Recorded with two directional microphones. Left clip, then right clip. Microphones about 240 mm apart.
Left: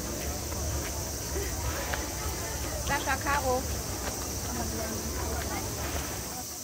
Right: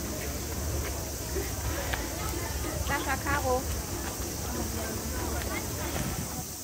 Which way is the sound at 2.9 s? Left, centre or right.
Left.